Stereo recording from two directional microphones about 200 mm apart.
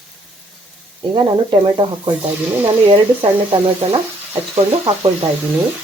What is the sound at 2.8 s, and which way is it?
Speech, 25° right (ahead or behind).